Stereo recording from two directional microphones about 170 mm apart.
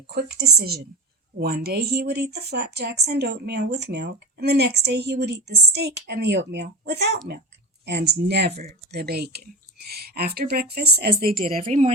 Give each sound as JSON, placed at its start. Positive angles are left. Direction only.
{"t": 0.1, "sound": "speech", "side_deg": -75}
{"t": 11.2, "sound": "a woman's voice", "side_deg": -60}